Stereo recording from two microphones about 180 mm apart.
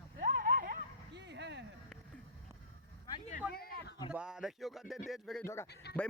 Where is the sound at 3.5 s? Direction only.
60° left (ahead or behind).